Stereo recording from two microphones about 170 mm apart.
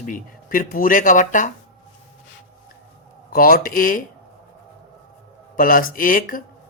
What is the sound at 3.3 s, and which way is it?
Speech, 60° left (ahead or behind).